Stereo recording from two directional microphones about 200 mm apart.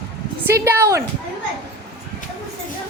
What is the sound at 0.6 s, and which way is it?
Speech, 15° right (ahead or behind).